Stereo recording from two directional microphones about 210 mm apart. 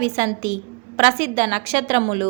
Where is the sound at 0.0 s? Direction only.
35° right (ahead or behind).